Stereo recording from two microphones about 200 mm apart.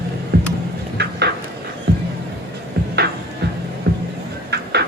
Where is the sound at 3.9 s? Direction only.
50° right (ahead or behind).